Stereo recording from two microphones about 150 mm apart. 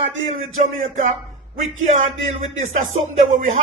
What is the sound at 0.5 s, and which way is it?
Speech, 55° right (ahead or behind).